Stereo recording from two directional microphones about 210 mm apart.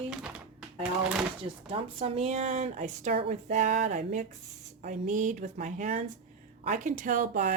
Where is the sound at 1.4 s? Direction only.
25° right (ahead or behind).